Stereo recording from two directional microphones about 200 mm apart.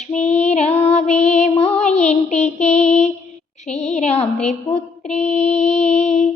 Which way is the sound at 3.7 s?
35° left (ahead or behind).